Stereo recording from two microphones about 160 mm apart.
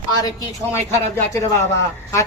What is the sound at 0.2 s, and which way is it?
A woman's voice, 20° left (ahead or behind).